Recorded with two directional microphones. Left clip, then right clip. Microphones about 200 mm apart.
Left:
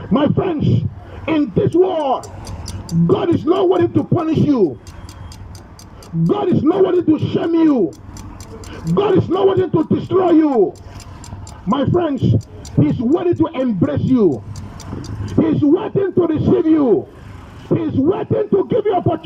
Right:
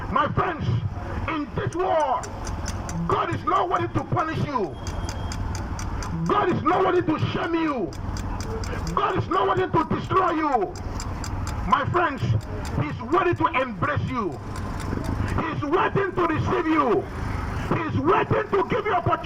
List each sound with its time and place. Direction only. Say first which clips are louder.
0.1 s a man's voice: left 6 dB; 45° left (ahead or behind)
6.2 s speech: left 5 dB; 40° left (ahead or behind)
9.0 s speech: left 8 dB; 40° left (ahead or behind)
11.7 s a man's voice: left 4 dB; 45° left (ahead or behind)
15.4 s a man's voice: left 9 dB; 45° left (ahead or behind)